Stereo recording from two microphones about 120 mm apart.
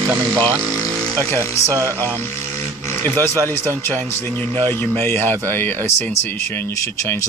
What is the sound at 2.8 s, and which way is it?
Speech, 20° left (ahead or behind).